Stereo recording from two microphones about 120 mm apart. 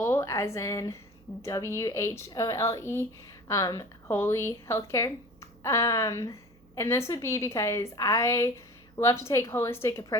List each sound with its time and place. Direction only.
0.0 s a woman's voice: 20° left (ahead or behind)